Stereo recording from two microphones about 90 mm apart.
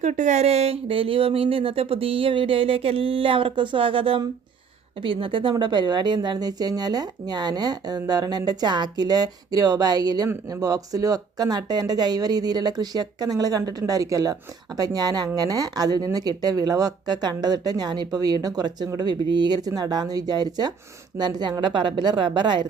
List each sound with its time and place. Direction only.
0.7 s a woman's voice: 90° right; by 22.6 s 60° right (ahead or behind)